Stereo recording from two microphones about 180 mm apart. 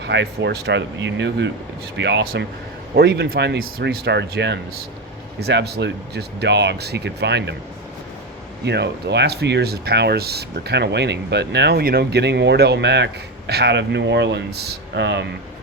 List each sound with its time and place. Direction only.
0.0 s speech: 75° right (ahead or behind)
2.9 s speech: 65° right (ahead or behind)
8.6 s speech: 70° right (ahead or behind)